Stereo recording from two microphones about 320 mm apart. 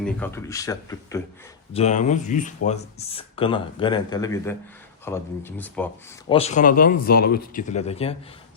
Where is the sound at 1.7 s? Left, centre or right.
Left; by 6.3 s centre.